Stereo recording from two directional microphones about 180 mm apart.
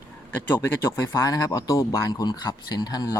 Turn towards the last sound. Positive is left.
turn(degrees=20)  # may be behind; listen again after turning